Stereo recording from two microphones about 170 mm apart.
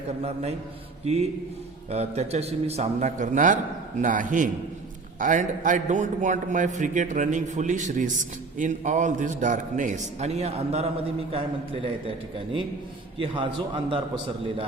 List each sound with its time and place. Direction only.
1.0 s a man's voice: 40° right (ahead or behind)
13.2 s a man's voice: 30° right (ahead or behind)